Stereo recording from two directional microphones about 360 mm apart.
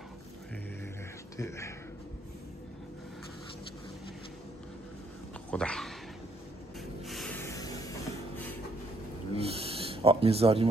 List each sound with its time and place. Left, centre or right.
1.3 s speech: centre
5.5 s cat: centre
7.1 s music: centre
9.3 s a sound: centre